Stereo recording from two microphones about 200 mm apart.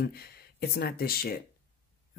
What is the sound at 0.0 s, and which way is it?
Speech, 50° left (ahead or behind).